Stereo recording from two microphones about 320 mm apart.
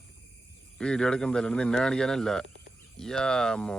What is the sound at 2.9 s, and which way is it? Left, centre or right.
Speech, centre.